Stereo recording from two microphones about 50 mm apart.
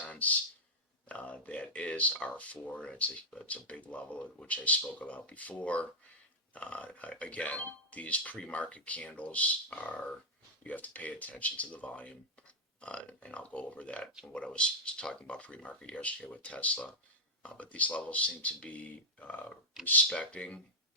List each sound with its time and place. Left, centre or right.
0.0 s a sound: left
1.7 s speech: left
20.1 s speech: left